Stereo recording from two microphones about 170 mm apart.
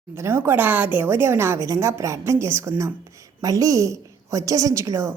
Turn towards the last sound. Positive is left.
turn(degrees=-15)  # may be behind; listen again after turning